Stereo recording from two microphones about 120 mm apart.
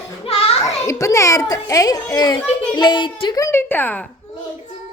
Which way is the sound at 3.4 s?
20° left (ahead or behind).